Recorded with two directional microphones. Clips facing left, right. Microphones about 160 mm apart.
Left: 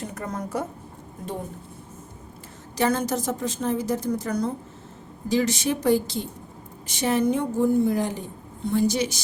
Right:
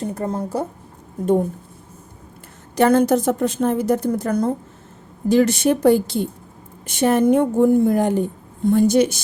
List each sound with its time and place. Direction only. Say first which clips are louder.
0.0 s speech: right 7 dB; 30° right (ahead or behind)
2.7 s a woman's voice: right 9 dB; 55° right (ahead or behind)